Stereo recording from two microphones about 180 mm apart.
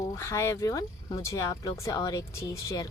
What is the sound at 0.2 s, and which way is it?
Speech, 15° left (ahead or behind).